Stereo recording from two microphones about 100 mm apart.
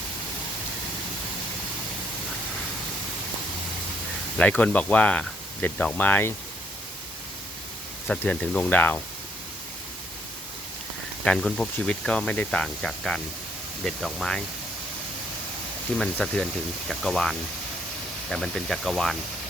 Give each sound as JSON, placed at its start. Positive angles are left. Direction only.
{"t": 4.4, "sound": "speech", "side_deg": 10}
{"t": 8.2, "sound": "speech", "side_deg": 15}
{"t": 11.3, "sound": "speech", "side_deg": 5}
{"t": 16.0, "sound": "speech", "side_deg": 5}